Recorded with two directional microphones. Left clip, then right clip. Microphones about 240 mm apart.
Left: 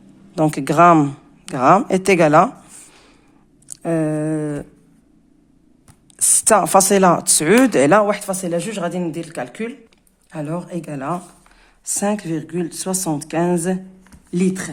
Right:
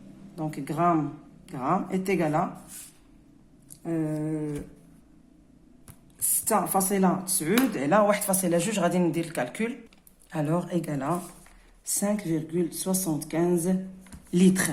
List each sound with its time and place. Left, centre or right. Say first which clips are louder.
0.3 s speech: left 15 dB; left
3.7 s a sound: left 10 dB; left
6.1 s speech: left 12 dB; left
8.0 s speech: left 4 dB; centre
11.9 s speech: left 7 dB; left
14.3 s speech: left 2 dB; centre